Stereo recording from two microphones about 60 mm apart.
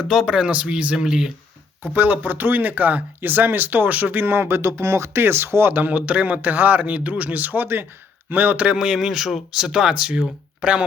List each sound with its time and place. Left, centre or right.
0.0 s speech: centre
0.9 s speech: centre
1.8 s speech: right
5.1 s a man's voice: right; by 10.8 s centre